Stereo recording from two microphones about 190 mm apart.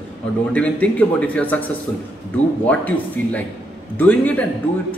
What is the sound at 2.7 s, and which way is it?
Speech, 10° left (ahead or behind).